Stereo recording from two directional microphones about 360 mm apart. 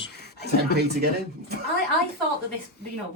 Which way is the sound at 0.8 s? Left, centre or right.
Right.